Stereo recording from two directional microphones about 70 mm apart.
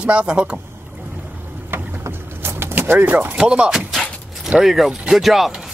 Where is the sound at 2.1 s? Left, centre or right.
Right.